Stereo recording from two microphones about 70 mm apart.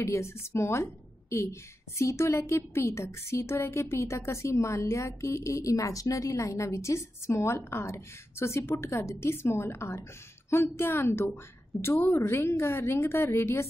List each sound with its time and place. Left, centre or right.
0.0 s a woman's voice: left